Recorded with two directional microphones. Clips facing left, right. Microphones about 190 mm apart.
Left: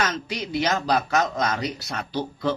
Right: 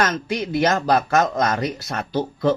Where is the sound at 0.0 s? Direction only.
55° right (ahead or behind).